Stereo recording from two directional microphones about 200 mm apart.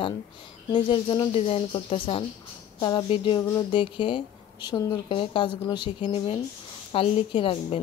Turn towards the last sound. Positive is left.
turn(degrees=25)  # may be behind; listen again after turning